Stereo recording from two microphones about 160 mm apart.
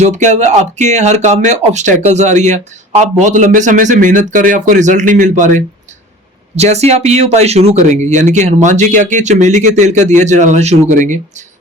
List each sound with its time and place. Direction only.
0.0 s speech: 50° right (ahead or behind)